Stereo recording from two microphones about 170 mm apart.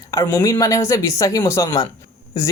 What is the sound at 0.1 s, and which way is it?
Speech, 20° left (ahead or behind).